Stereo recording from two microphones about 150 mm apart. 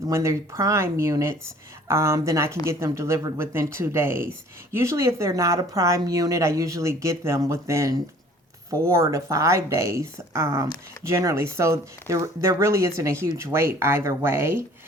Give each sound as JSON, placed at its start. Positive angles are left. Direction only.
{"t": 0.1, "sound": "speech", "side_deg": -20}